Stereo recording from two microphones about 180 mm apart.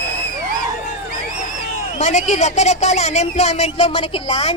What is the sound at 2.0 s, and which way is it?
Speech, 40° left (ahead or behind).